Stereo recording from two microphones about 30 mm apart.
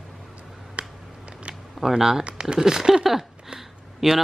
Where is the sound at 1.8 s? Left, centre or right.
Centre.